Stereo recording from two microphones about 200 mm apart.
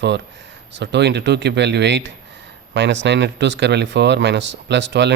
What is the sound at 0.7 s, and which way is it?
Speech, 60° right (ahead or behind).